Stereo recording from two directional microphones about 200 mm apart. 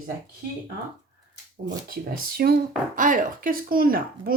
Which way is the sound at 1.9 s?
50° right (ahead or behind).